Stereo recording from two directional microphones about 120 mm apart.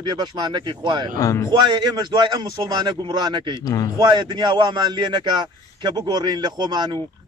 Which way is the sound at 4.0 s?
35° right (ahead or behind).